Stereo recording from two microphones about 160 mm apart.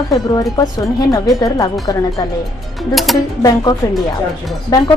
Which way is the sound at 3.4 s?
25° left (ahead or behind).